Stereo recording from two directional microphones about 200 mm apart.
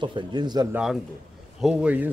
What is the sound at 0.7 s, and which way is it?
Speech, 5° right (ahead or behind).